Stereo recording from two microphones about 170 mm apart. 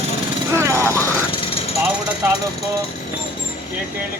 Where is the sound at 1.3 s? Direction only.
35° left (ahead or behind).